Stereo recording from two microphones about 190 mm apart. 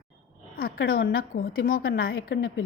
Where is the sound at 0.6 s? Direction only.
50° left (ahead or behind).